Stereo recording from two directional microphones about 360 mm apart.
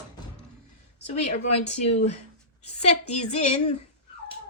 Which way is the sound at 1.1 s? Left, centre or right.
Centre.